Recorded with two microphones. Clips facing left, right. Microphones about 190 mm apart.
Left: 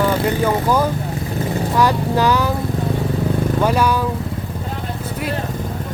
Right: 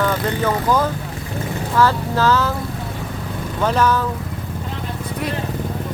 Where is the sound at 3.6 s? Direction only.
10° left (ahead or behind).